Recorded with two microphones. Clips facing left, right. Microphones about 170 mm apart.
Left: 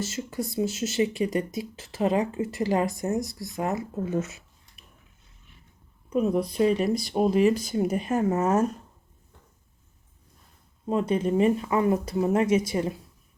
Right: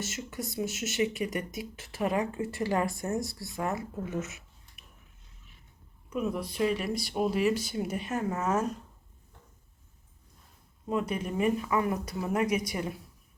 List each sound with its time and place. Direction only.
0.0 s speech: 30° left (ahead or behind)
6.1 s speech: 35° left (ahead or behind)
10.8 s speech: 30° left (ahead or behind)